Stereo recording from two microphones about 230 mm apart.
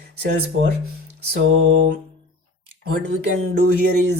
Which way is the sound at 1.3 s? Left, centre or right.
Right.